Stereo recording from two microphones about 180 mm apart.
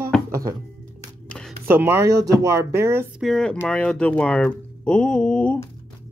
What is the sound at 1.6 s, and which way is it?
Speech, 10° right (ahead or behind).